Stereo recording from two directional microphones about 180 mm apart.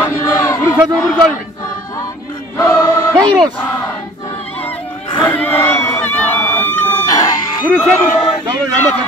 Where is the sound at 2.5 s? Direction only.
15° left (ahead or behind).